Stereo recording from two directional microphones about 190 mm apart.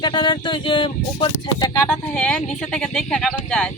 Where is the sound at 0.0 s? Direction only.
25° left (ahead or behind).